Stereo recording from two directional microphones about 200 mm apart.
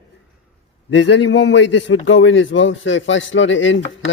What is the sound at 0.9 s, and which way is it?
A man's voice, 60° left (ahead or behind).